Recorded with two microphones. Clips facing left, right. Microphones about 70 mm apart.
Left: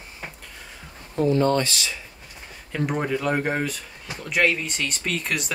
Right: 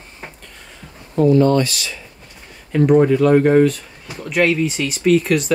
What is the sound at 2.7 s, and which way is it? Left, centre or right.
Speech, centre.